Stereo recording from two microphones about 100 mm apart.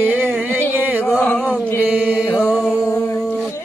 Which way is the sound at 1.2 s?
15° left (ahead or behind).